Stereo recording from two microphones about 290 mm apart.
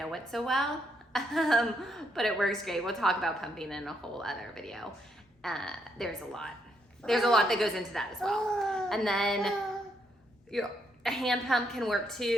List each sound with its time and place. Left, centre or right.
0.0 s a woman's voice: centre
10.5 s a woman's voice: centre